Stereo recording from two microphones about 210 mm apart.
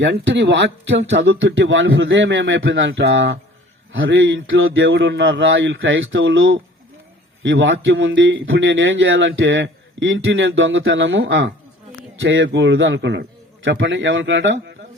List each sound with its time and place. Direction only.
0.0 s a man's voice: 55° right (ahead or behind)